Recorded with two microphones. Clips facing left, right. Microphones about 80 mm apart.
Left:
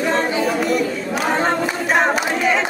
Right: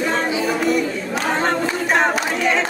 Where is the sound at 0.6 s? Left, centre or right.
Centre.